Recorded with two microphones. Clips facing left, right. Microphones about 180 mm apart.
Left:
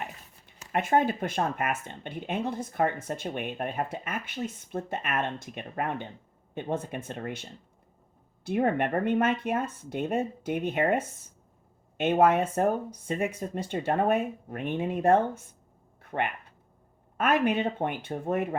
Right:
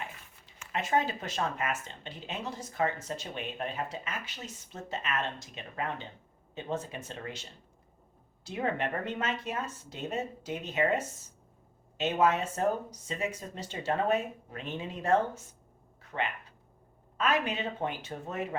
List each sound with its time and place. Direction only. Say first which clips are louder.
0.7 s speech: left 5 dB; 55° left (ahead or behind)
8.4 s speech: left 6 dB; 55° left (ahead or behind)
16.0 s a sound: left 4 dB; 55° left (ahead or behind)
17.2 s speech: left 5 dB; 55° left (ahead or behind)